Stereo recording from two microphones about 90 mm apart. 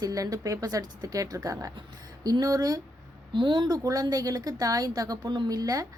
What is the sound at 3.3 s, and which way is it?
A woman's voice, 65° right (ahead or behind).